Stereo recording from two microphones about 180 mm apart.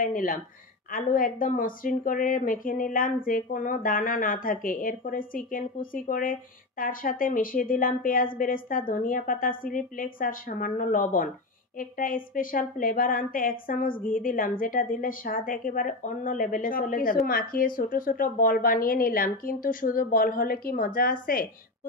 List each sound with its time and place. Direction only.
0.0 s a woman's voice: 50° left (ahead or behind)